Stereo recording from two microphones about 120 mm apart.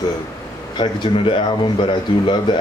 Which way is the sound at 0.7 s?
45° left (ahead or behind).